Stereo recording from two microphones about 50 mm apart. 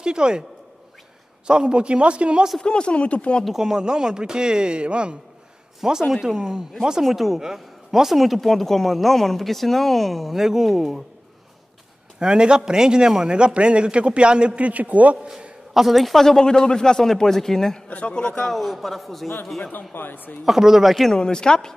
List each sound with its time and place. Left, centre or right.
0.0 s speech: centre
1.5 s a man's voice: centre
2.6 s speech: centre
3.5 s speech: centre
7.1 s a woman's voice: centre
12.2 s a man's voice: centre
15.7 s speech: centre
17.8 s a man's voice: left
18.1 s speech: centre
18.5 s a woman's voice: centre
19.9 s a man's voice: left
20.4 s a woman's voice: centre
21.1 s speech: centre